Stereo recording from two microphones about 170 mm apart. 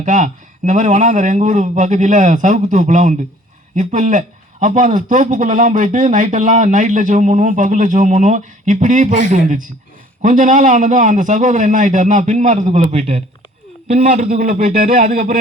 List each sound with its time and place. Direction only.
0.0 s a man's voice: 45° right (ahead or behind)